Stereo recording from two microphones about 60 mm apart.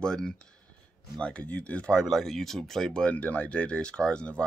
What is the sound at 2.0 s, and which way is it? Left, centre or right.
Speech, centre.